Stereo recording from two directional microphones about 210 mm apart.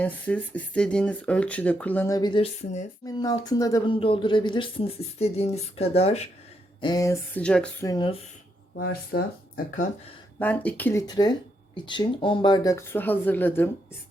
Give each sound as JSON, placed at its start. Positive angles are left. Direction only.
{"t": 0.0, "sound": "speech", "side_deg": 5}
{"t": 2.1, "sound": "speech", "side_deg": 20}
{"t": 6.8, "sound": "speech", "side_deg": 15}
{"t": 7.9, "sound": "speech", "side_deg": 20}
{"t": 8.7, "sound": "speech", "side_deg": 45}
{"t": 10.3, "sound": "speech", "side_deg": 10}